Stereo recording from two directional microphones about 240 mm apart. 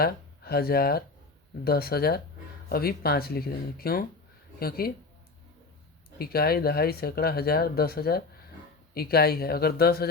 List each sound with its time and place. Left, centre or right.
0.0 s speech: left
6.1 s speech: left